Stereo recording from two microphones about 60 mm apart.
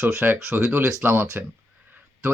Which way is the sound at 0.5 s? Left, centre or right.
Right.